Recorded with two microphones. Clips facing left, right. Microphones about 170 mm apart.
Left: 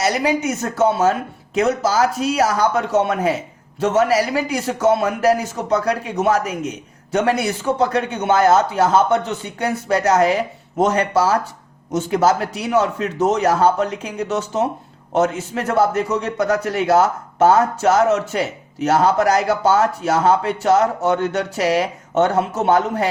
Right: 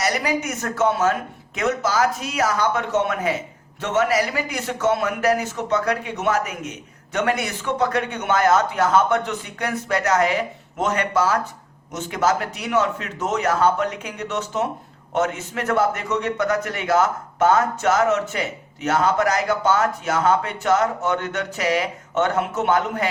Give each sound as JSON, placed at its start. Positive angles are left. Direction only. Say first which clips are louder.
{"t": 0.0, "sound": "a man's voice", "louder": "left 4 dB", "side_deg": 30}